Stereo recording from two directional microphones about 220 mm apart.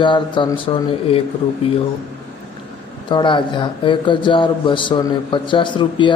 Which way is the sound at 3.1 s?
20° left (ahead or behind).